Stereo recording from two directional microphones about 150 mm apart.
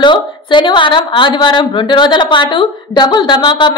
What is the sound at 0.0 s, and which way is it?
A woman's voice, 30° left (ahead or behind).